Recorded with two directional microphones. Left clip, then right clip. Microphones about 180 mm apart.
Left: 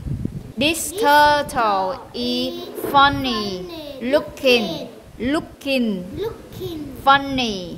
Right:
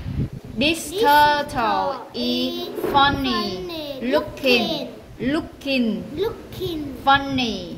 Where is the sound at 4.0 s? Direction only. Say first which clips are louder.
Left 3 dB; 50° left (ahead or behind).